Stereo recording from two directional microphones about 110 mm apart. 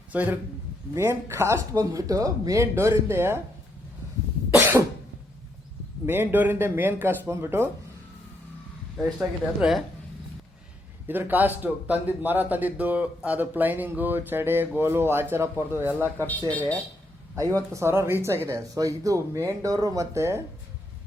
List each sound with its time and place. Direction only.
0.1 s a man's voice: 15° right (ahead or behind)
6.1 s speech: 20° right (ahead or behind)
9.0 s speech: 5° right (ahead or behind)
11.1 s a man's voice: 15° right (ahead or behind)
16.5 s speech: 15° left (ahead or behind)
17.3 s speech: 25° right (ahead or behind)